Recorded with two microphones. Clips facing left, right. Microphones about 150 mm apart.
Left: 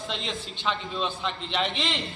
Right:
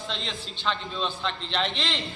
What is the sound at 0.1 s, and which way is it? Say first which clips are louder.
Speech: left 2 dB; centre (ahead or behind).